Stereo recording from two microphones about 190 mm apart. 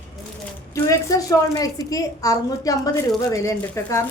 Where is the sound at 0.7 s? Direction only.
15° left (ahead or behind).